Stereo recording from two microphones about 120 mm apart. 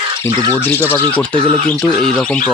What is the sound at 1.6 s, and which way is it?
Speech, 5° left (ahead or behind).